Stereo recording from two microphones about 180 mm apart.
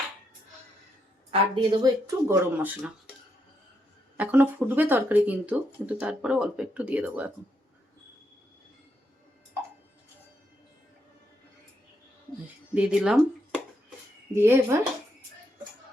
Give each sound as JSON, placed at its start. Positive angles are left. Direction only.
{"t": 1.3, "sound": "speech", "side_deg": -30}
{"t": 4.2, "sound": "speech", "side_deg": -10}
{"t": 12.7, "sound": "speech", "side_deg": -5}
{"t": 14.3, "sound": "speech", "side_deg": -15}